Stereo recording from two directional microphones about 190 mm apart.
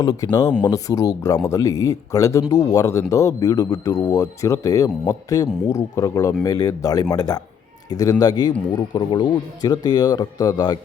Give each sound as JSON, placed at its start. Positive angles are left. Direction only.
{"t": 0.0, "sound": "speech", "side_deg": 20}